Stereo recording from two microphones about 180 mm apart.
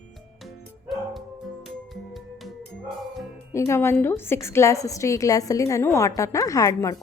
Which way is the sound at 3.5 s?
15° left (ahead or behind).